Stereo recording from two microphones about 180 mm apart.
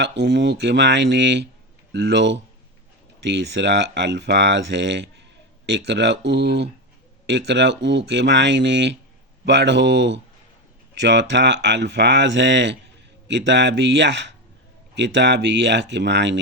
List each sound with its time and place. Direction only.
0.0 s speech: 75° right (ahead or behind)